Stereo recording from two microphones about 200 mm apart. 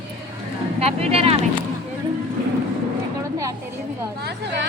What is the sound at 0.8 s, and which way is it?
Speech, 30° right (ahead or behind).